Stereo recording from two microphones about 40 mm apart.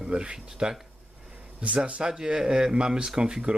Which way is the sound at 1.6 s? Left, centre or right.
Right.